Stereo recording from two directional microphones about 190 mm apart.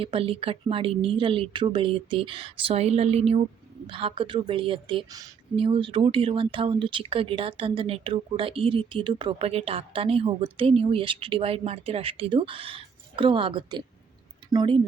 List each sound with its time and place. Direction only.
0.0 s speech: 30° right (ahead or behind)